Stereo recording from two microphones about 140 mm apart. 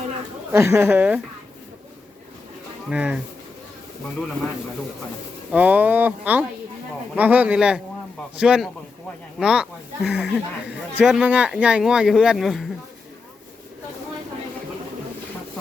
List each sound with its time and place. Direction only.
0.5 s speech: 20° right (ahead or behind)
2.9 s speech: 10° right (ahead or behind)
5.5 s speech: 10° right (ahead or behind)